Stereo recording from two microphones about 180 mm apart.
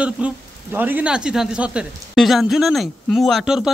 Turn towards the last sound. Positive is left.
turn(degrees=0)  # may be behind; listen again after turning